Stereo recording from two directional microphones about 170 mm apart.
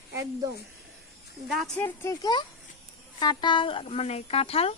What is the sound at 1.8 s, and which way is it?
Speech, 15° left (ahead or behind).